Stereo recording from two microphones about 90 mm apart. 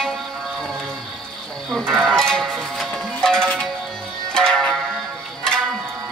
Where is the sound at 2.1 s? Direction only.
5° left (ahead or behind).